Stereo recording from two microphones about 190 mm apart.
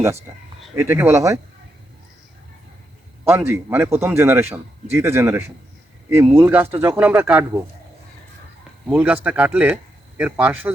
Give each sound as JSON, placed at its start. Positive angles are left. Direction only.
{"t": 0.8, "sound": "a man's voice", "side_deg": -10}
{"t": 3.2, "sound": "a man's voice", "side_deg": -15}
{"t": 8.9, "sound": "a man's voice", "side_deg": -5}